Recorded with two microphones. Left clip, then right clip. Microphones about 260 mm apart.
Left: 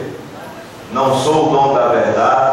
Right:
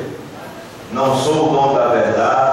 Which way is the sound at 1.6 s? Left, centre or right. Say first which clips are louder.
Left 1 dB; centre.